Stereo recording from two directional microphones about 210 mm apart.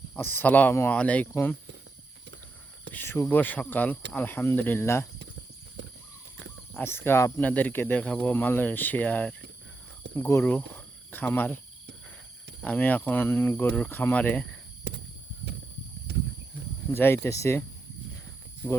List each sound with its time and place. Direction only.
0.2 s speech: 10° left (ahead or behind)
2.9 s speech: 10° left (ahead or behind)
5.8 s a sound: 55° right (ahead or behind)
6.4 s speech: 10° left (ahead or behind)
12.6 s speech: 5° left (ahead or behind)
14.9 s a sound: 55° right (ahead or behind)
16.1 s cricket: 50° right (ahead or behind)
16.9 s speech: 10° left (ahead or behind)